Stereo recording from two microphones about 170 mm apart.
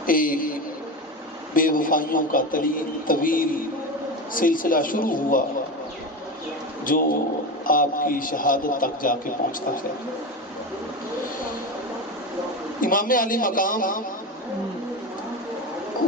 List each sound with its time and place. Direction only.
0.0 s a man's voice: 55° left (ahead or behind)
6.8 s a man's voice: 55° left (ahead or behind)
12.8 s a man's voice: 55° left (ahead or behind)